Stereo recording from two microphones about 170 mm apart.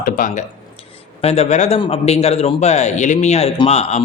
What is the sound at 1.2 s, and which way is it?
Speech, 35° left (ahead or behind).